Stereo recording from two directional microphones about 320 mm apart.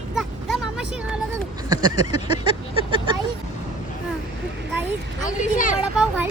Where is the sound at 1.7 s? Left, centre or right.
Centre.